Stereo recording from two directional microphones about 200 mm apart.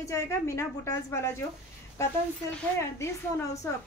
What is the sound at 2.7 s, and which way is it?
Speech, 15° left (ahead or behind).